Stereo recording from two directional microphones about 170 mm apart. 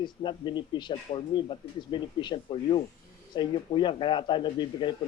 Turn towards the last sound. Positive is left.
turn(degrees=25)  # may be behind; listen again after turning